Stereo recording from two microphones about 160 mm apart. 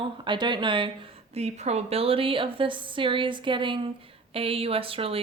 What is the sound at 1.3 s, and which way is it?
Speech, 40° right (ahead or behind).